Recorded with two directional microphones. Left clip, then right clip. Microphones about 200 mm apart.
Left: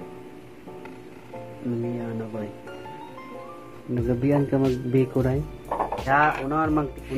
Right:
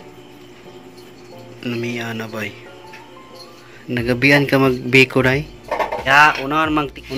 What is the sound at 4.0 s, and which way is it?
A man's voice, 25° right (ahead or behind).